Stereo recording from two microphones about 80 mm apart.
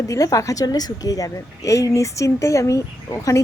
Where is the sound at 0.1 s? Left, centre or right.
Left.